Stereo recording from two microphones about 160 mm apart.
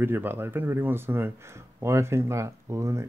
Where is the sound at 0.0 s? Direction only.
15° right (ahead or behind).